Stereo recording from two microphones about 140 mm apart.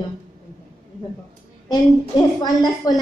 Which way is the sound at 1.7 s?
25° left (ahead or behind).